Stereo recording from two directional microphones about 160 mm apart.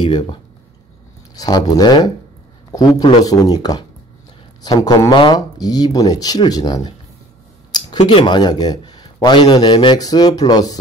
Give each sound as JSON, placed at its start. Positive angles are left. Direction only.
{"t": 0.0, "sound": "a man's voice", "side_deg": 30}
{"t": 8.1, "sound": "a man's voice", "side_deg": 30}